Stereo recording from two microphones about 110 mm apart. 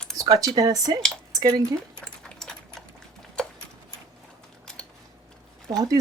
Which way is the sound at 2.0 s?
5° left (ahead or behind).